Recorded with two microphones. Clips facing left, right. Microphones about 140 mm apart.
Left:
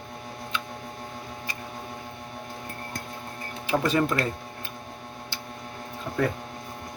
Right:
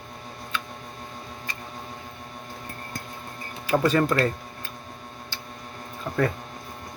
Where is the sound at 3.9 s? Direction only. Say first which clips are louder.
Right 3 dB; 15° left (ahead or behind).